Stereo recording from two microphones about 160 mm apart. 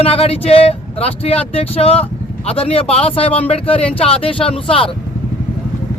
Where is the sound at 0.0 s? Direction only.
40° left (ahead or behind).